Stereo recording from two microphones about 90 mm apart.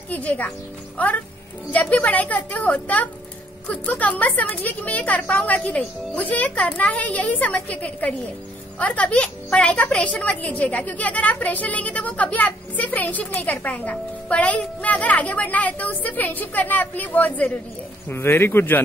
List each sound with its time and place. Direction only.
0.1 s a woman's voice: 15° left (ahead or behind)